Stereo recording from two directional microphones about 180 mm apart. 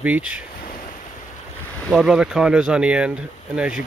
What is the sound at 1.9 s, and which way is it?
Speech, 5° right (ahead or behind).